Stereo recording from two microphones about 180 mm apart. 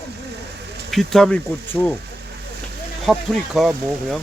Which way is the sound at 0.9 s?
Centre (ahead or behind).